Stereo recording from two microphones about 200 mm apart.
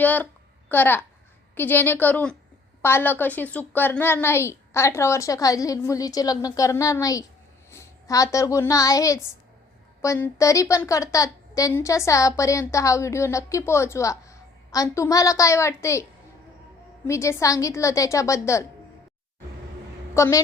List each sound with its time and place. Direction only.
0.0 s a woman's voice: 10° left (ahead or behind)
17.1 s a woman's voice: 15° left (ahead or behind)
20.1 s a woman's voice: 15° left (ahead or behind)